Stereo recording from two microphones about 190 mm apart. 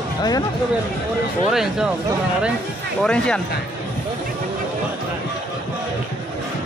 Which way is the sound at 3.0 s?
5° left (ahead or behind).